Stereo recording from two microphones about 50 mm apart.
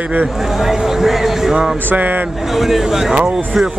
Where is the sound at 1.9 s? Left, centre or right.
Right.